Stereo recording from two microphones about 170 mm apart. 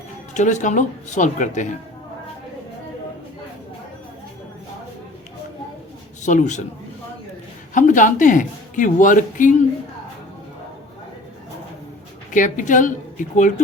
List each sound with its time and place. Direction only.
0.3 s speech: 45° left (ahead or behind)
6.2 s speech: 45° left (ahead or behind)
7.7 s speech: 50° left (ahead or behind)
12.3 s speech: 50° left (ahead or behind)